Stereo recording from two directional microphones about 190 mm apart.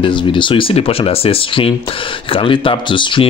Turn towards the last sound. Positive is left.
turn(degrees=25)  # may be behind; listen again after turning